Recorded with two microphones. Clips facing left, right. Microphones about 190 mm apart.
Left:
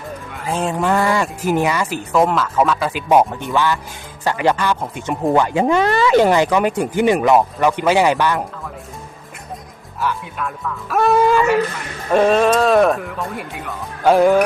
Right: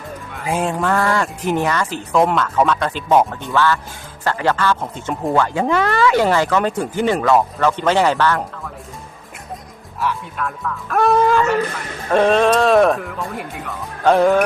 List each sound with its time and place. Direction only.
0.8 s speech: 15° left (ahead or behind)
10.0 s speech: centre (ahead or behind)